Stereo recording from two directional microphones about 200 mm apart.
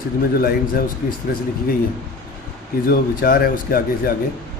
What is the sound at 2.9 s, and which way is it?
A man's voice, 45° left (ahead or behind).